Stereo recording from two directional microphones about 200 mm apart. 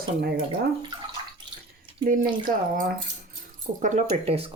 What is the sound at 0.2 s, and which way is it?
Speech, 50° right (ahead or behind).